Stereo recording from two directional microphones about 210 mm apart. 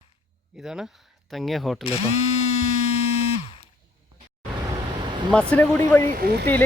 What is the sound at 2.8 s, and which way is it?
Buzzer, 30° left (ahead or behind).